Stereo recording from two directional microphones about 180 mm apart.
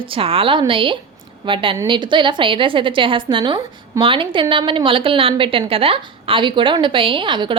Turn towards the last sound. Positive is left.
turn(degrees=-25)  # may be behind; listen again after turning